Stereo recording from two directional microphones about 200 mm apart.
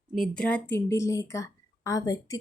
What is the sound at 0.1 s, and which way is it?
A woman's voice, centre (ahead or behind).